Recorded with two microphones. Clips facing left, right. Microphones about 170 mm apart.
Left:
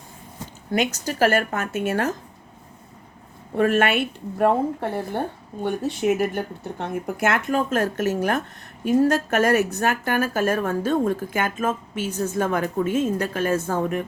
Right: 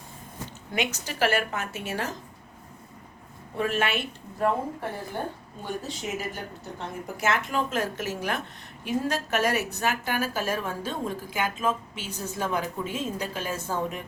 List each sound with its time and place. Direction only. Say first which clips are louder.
0.7 s a woman's voice: left 7 dB; 40° left (ahead or behind)
3.6 s a woman's voice: left 8 dB; 55° left (ahead or behind)